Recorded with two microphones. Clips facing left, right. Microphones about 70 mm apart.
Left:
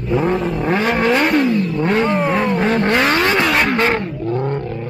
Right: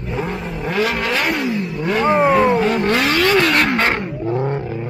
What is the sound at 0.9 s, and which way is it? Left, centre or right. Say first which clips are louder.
Vehicle: left 5 dB; centre.